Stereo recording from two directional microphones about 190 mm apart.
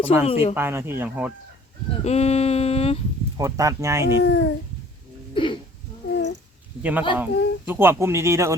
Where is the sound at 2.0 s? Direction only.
35° left (ahead or behind).